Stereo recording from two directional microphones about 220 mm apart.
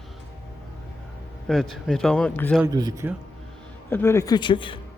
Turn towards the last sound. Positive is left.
turn(degrees=20)  # may be behind; listen again after turning